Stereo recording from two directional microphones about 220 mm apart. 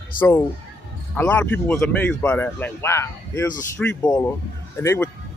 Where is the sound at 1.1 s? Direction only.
10° left (ahead or behind).